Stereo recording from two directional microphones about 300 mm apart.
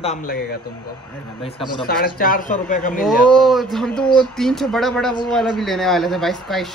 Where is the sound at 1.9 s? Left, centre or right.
Left.